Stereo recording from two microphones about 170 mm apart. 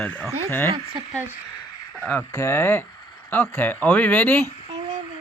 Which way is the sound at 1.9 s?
10° left (ahead or behind).